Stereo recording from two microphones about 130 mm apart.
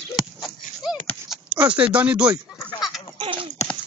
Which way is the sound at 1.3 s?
10° right (ahead or behind).